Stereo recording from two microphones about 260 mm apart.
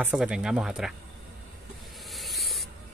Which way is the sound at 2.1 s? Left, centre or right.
Centre.